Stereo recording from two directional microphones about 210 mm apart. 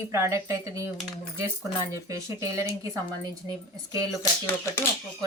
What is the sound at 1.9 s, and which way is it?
Speech, 15° right (ahead or behind).